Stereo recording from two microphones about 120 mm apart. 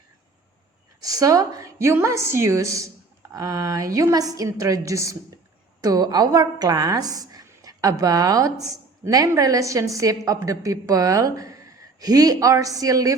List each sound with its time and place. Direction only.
1.0 s a woman's voice: 30° right (ahead or behind)